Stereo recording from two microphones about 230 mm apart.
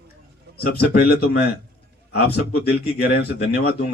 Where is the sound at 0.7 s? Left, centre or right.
Left.